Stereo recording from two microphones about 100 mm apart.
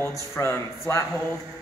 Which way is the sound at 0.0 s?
30° left (ahead or behind).